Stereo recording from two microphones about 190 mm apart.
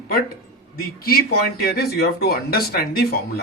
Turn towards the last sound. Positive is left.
turn(degrees=55)  # may be behind; listen again after turning